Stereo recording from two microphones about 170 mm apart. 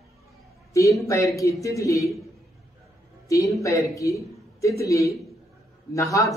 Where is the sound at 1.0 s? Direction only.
20° left (ahead or behind).